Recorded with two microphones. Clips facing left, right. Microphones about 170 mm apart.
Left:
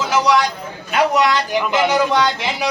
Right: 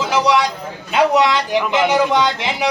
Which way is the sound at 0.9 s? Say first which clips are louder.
Right 2 dB; 20° right (ahead or behind).